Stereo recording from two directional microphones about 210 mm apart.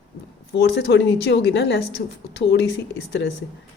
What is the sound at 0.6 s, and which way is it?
A woman's voice, 55° left (ahead or behind).